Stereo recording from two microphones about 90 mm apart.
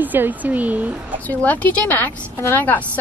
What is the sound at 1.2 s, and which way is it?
A woman's voice, 20° left (ahead or behind).